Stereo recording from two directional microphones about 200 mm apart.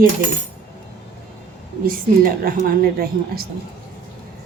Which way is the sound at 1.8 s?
45° right (ahead or behind).